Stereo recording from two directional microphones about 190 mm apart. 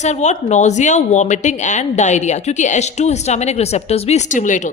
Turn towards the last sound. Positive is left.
turn(degrees=40)  # may be behind; listen again after turning